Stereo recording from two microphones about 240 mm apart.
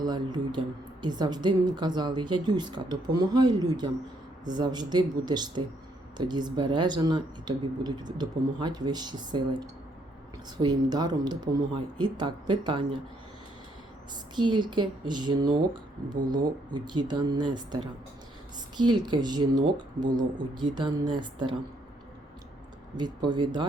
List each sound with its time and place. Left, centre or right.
0.0 s speech: centre
14.3 s speech: centre
23.0 s speech: centre